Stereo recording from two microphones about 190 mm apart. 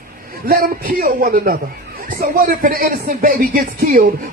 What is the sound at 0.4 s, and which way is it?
Speech, 50° right (ahead or behind).